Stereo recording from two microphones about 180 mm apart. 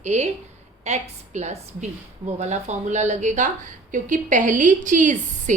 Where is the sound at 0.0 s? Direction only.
40° right (ahead or behind).